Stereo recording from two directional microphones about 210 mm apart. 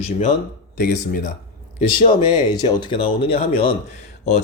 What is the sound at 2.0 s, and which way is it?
A man's voice, 20° left (ahead or behind).